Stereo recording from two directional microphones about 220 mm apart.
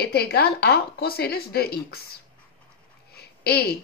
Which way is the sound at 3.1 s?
45° left (ahead or behind).